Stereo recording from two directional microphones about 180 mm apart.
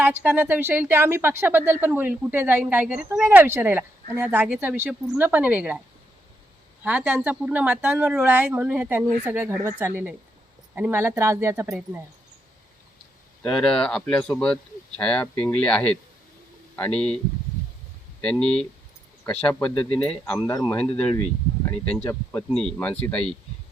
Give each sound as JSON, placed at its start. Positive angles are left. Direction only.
{"t": 0.0, "sound": "speech", "side_deg": -10}
{"t": 6.8, "sound": "speech", "side_deg": -10}
{"t": 13.4, "sound": "speech", "side_deg": 5}
{"t": 18.2, "sound": "speech", "side_deg": 5}
{"t": 20.5, "sound": "a man's voice", "side_deg": 20}
{"t": 21.2, "sound": "speech", "side_deg": 5}